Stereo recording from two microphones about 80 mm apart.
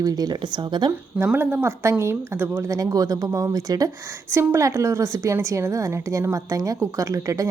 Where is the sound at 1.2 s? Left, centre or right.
Right.